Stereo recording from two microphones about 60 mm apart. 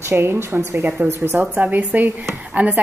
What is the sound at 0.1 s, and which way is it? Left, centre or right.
Speech, right.